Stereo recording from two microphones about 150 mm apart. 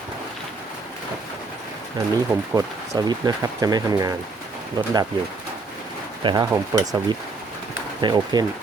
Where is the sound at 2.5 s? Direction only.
20° right (ahead or behind).